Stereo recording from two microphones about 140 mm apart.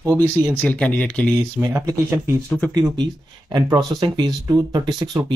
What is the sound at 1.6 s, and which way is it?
Speech, 20° right (ahead or behind).